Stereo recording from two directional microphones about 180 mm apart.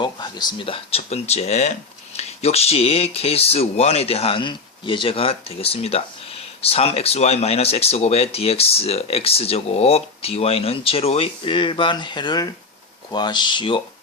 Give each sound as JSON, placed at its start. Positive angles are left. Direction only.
{"t": 0.0, "sound": "speech", "side_deg": 25}